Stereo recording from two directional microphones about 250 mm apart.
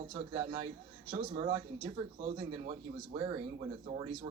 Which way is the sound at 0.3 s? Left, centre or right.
Right.